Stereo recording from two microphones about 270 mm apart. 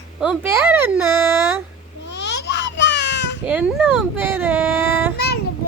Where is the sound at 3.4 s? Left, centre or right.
Centre.